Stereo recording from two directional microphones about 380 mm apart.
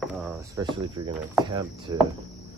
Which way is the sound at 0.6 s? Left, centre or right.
Centre.